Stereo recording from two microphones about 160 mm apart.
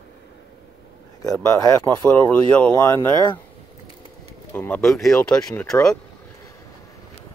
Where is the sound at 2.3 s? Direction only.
10° left (ahead or behind).